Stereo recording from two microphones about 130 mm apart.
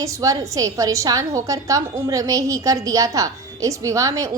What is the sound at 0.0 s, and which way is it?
A woman's voice, 25° right (ahead or behind).